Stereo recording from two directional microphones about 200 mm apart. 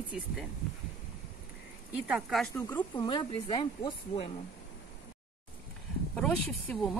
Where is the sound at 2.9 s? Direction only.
20° left (ahead or behind).